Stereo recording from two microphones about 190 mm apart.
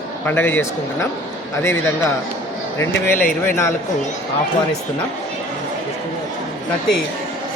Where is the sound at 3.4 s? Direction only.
10° left (ahead or behind).